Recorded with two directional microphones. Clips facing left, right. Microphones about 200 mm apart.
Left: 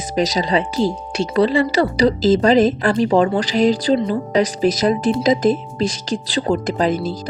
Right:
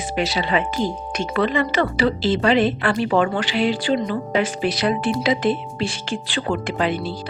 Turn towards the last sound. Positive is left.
turn(degrees=40)  # may be behind; listen again after turning